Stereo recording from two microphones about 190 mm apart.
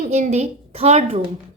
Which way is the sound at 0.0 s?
40° right (ahead or behind).